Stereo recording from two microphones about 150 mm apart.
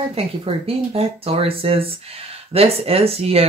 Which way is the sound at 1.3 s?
40° right (ahead or behind).